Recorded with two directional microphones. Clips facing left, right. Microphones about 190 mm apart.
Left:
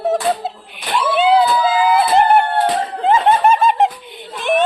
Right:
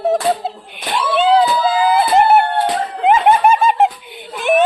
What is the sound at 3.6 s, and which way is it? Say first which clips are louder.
Laughter: right 1 dB; 5° right (ahead or behind).